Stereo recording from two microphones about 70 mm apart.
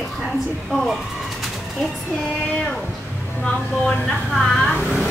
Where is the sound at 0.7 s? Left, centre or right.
Centre.